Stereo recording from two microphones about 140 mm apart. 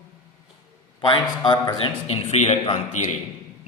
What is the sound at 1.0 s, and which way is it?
A man's voice, 35° left (ahead or behind).